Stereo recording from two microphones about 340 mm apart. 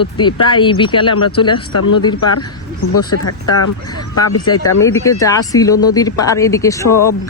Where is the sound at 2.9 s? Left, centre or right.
Left.